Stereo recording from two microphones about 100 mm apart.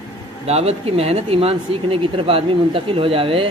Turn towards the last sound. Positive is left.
turn(degrees=-65)  # may be behind; listen again after turning